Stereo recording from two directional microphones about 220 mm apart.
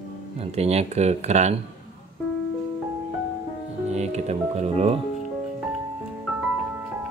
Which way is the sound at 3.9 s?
30° right (ahead or behind).